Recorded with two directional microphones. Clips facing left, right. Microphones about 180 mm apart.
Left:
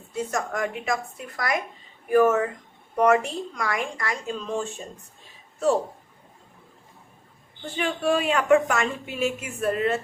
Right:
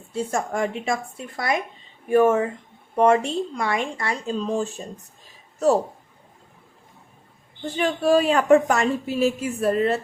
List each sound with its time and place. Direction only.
0.1 s speech: 30° right (ahead or behind)
7.8 s a woman's voice: 40° right (ahead or behind)